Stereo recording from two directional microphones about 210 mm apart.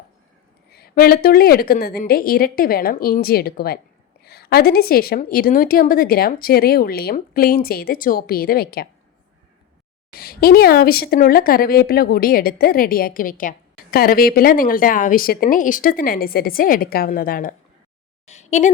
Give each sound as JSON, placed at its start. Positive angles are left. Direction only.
{"t": 0.7, "sound": "speech", "side_deg": 45}
{"t": 10.2, "sound": "speech", "side_deg": 45}
{"t": 18.3, "sound": "a sound", "side_deg": 35}